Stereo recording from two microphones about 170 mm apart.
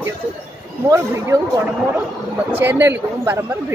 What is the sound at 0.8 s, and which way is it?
Speech, 20° right (ahead or behind).